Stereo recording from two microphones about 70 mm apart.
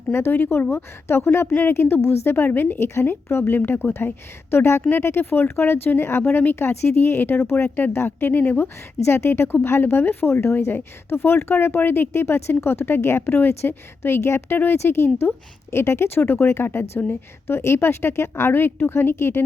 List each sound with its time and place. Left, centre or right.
0.1 s speech: left